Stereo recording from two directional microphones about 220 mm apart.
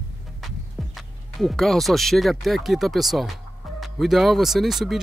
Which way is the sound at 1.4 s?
Centre (ahead or behind).